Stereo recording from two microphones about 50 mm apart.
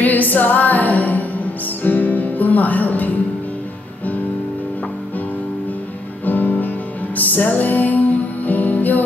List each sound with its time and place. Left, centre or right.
0.0 s female singing: left
1.8 s music: left
6.2 s music: left